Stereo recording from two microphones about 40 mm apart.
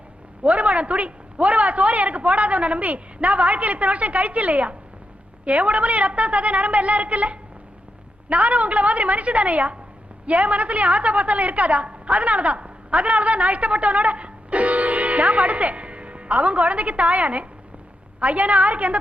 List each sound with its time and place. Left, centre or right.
0.4 s a man's voice: right